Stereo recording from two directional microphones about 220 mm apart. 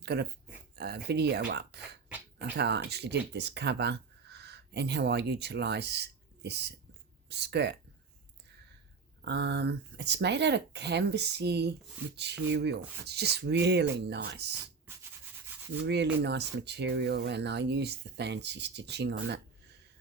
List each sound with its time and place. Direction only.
0.0 s speech: 50° right (ahead or behind)
9.2 s speech: 50° right (ahead or behind)
15.8 s speech: 50° right (ahead or behind)